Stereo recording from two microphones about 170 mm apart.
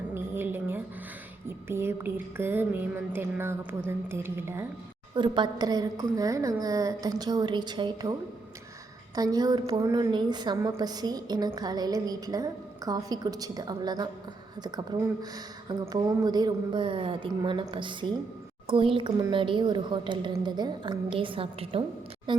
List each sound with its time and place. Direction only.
0.1 s music: 10° right (ahead or behind)
5.1 s a woman's voice: 30° right (ahead or behind)
9.1 s a woman's voice: 20° right (ahead or behind)